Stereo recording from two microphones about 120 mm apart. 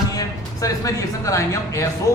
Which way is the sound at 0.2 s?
30° left (ahead or behind).